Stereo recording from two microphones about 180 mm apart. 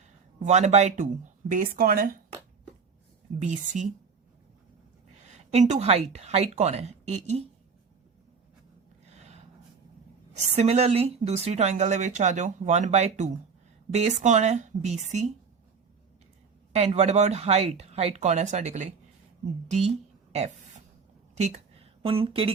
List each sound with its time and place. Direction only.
0.0 s speech: 40° right (ahead or behind)
3.3 s speech: 45° right (ahead or behind)
5.2 s a woman's voice: 40° right (ahead or behind)
10.4 s speech: 35° right (ahead or behind)
16.7 s a woman's voice: 35° right (ahead or behind)